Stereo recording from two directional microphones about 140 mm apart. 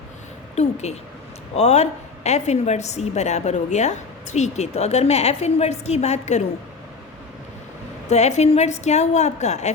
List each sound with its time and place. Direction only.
0.5 s a woman's voice: 50° left (ahead or behind)
8.1 s a woman's voice: 55° left (ahead or behind)